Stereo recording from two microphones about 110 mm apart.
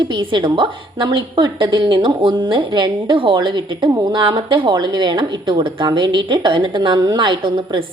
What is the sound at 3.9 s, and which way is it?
A woman's voice, 35° right (ahead or behind).